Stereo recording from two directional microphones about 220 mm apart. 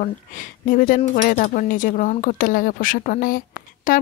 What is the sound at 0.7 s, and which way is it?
Speech, 40° left (ahead or behind).